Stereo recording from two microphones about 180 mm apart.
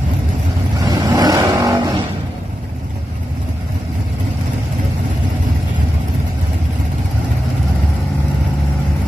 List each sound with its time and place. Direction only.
0.8 s vehicle: 25° right (ahead or behind)